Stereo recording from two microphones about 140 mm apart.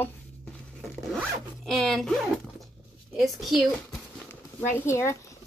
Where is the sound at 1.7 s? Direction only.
5° left (ahead or behind).